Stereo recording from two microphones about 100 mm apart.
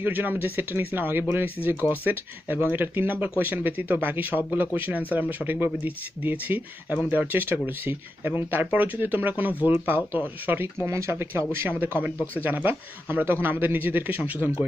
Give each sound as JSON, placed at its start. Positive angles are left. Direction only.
{"t": 0.0, "sound": "speech", "side_deg": -20}